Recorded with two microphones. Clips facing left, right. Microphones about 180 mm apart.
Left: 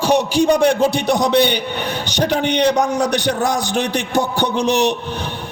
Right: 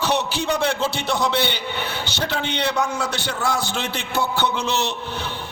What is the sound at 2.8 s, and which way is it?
Speech, 40° left (ahead or behind).